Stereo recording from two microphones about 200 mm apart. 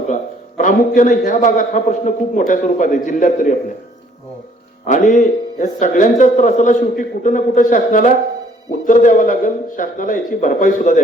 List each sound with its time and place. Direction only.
0.1 s a man's voice: 40° left (ahead or behind)
4.9 s a man's voice: 40° left (ahead or behind)